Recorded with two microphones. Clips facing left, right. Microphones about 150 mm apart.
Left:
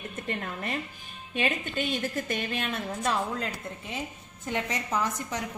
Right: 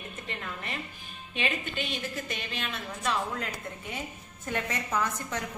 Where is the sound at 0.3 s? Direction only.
40° left (ahead or behind).